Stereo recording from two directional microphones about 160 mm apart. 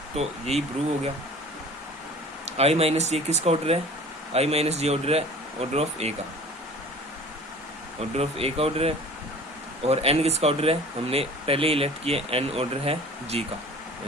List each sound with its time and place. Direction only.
0.2 s speech: 40° right (ahead or behind)
2.6 s speech: 40° right (ahead or behind)
8.1 s speech: 40° right (ahead or behind)